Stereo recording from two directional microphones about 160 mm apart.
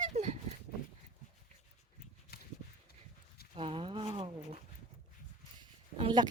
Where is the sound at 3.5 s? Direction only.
35° right (ahead or behind).